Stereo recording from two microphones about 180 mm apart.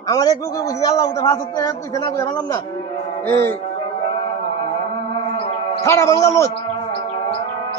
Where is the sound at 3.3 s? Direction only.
15° left (ahead or behind).